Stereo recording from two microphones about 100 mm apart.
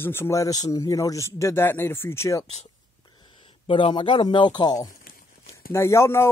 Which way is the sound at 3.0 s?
50° left (ahead or behind).